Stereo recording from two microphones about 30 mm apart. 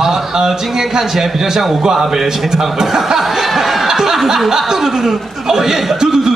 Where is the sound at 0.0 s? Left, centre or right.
Centre.